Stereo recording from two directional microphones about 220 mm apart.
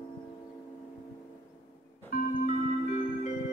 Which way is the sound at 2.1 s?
35° left (ahead or behind).